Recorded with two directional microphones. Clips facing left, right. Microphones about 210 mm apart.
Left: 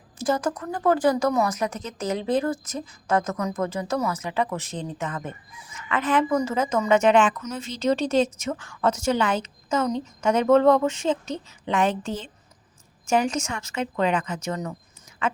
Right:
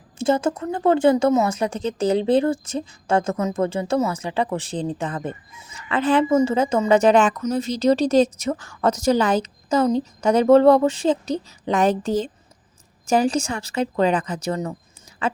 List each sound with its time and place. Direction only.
0.2 s speech: 25° right (ahead or behind)